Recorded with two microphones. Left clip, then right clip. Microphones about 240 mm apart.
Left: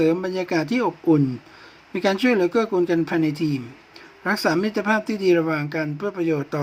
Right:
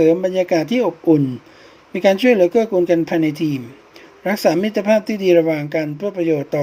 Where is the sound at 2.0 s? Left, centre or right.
Left.